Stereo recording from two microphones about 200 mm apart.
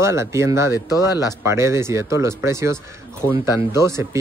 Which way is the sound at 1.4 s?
15° right (ahead or behind).